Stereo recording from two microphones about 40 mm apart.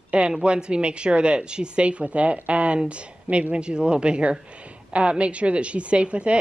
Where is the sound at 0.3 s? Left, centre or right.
Right.